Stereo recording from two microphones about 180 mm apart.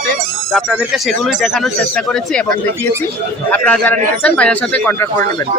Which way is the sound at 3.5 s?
5° left (ahead or behind).